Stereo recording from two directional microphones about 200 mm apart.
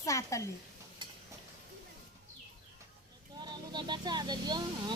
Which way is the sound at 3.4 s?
20° right (ahead or behind).